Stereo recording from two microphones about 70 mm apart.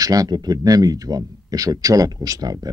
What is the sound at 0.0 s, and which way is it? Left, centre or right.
Speech, right.